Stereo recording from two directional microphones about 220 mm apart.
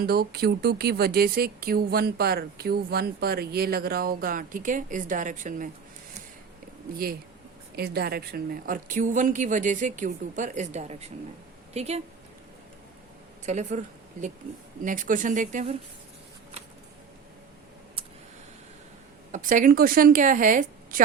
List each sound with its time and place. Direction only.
0.0 s speech: 45° right (ahead or behind)
6.9 s a woman's voice: 40° right (ahead or behind)
13.4 s a woman's voice: 30° right (ahead or behind)
19.3 s a woman's voice: 35° right (ahead or behind)